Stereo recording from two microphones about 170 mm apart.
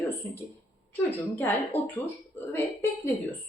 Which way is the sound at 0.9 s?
10° left (ahead or behind).